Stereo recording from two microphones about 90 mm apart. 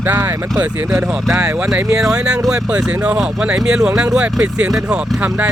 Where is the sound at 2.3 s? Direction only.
10° right (ahead or behind).